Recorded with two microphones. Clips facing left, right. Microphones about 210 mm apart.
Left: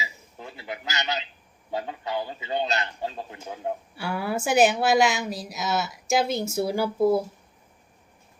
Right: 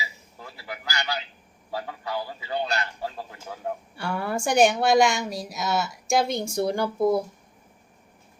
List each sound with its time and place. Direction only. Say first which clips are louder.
0.0 s a sound: left 1 dB; 20° left (ahead or behind)
1.7 s a man's voice: left 2 dB; 20° left (ahead or behind)
3.9 s a woman's voice: right 1 dB; 5° left (ahead or behind)